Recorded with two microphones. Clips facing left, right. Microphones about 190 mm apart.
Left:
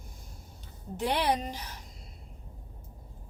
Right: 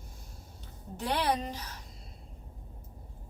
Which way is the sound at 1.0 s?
15° left (ahead or behind).